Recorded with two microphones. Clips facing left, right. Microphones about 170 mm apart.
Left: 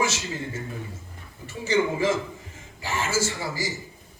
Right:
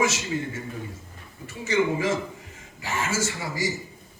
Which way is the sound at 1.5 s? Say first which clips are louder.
Even; 30° left (ahead or behind).